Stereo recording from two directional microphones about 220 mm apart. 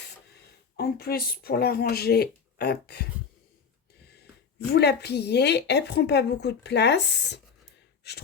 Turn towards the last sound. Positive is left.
turn(degrees=50)  # may be behind; listen again after turning